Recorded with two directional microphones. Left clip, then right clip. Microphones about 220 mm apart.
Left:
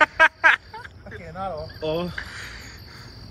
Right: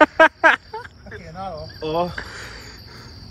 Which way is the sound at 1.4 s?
5° left (ahead or behind).